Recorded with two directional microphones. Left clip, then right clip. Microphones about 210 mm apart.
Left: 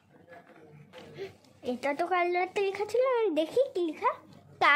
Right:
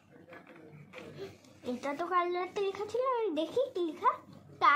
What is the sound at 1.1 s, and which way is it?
A woman's voice, 35° left (ahead or behind).